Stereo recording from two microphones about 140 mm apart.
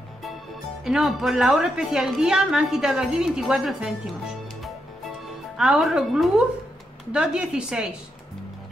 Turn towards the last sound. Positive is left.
turn(degrees=-5)  # may be behind; listen again after turning